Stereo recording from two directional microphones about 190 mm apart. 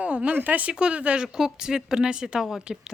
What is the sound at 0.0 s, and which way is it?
Speech, 5° right (ahead or behind).